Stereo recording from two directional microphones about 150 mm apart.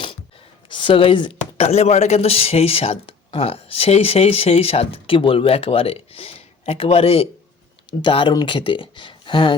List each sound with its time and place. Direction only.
0.7 s speech: 35° left (ahead or behind)